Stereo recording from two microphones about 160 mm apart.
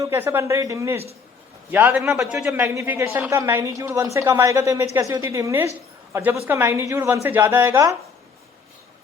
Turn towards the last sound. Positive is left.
turn(degrees=-15)  # may be behind; listen again after turning